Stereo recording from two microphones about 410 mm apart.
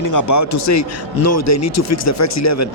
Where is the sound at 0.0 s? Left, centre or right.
Left.